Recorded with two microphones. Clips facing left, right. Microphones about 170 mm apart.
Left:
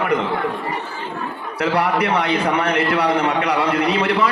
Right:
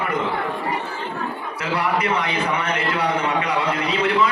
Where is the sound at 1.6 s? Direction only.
65° left (ahead or behind).